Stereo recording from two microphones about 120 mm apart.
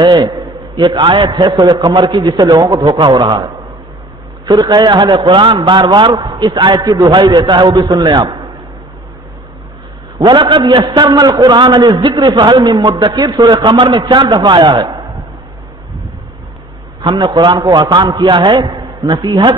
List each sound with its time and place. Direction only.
0.0 s a man's voice: 35° right (ahead or behind)
10.1 s a man's voice: 40° right (ahead or behind)
17.0 s a man's voice: 40° right (ahead or behind)